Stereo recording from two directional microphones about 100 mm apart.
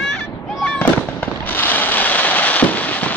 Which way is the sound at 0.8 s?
20° left (ahead or behind).